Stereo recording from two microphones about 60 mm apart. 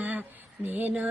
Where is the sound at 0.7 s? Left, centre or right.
Right.